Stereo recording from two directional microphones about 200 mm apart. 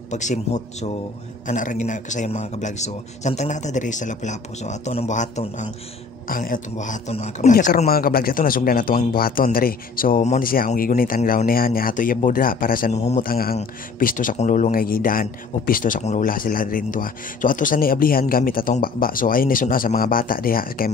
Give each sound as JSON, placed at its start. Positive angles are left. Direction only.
{"t": 0.1, "sound": "a man's voice", "side_deg": 35}
{"t": 7.5, "sound": "speech", "side_deg": 45}